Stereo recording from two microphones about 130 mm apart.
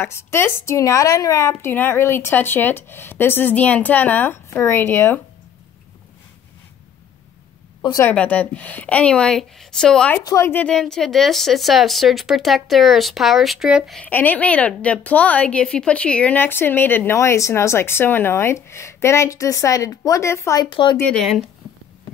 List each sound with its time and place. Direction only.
0.0 s a woman's voice: 20° left (ahead or behind)
8.0 s a woman's voice: 10° left (ahead or behind)
10.2 s a woman's voice: 20° left (ahead or behind)
10.7 s speech: 5° left (ahead or behind)
13.9 s a woman's voice: 15° left (ahead or behind)
20.7 s speech: 40° left (ahead or behind)
21.0 s speech: 5° left (ahead or behind)